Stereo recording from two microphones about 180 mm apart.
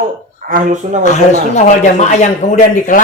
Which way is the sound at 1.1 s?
40° left (ahead or behind).